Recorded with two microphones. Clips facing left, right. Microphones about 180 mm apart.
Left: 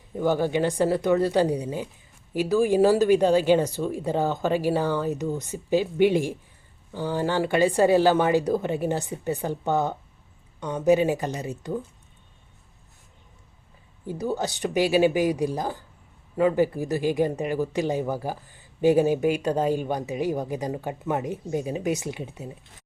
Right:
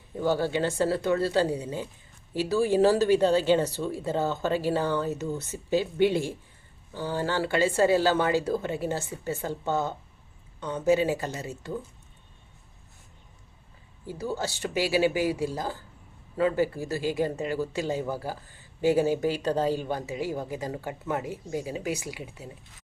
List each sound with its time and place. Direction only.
0.2 s speech: 15° left (ahead or behind)
14.1 s speech: 20° left (ahead or behind)